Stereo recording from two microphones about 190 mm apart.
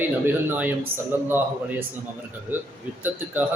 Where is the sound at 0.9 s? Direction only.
30° right (ahead or behind).